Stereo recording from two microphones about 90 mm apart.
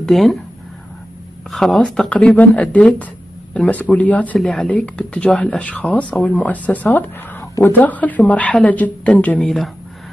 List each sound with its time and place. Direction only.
0.0 s speech: centre (ahead or behind)
1.5 s speech: 5° left (ahead or behind)
9.4 s speech: 5° left (ahead or behind)